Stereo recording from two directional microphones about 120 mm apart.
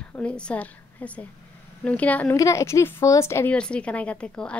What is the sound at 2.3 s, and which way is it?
A woman's voice, 25° left (ahead or behind).